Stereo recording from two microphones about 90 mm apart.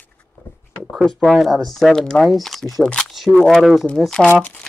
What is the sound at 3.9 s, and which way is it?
Speech, 5° left (ahead or behind).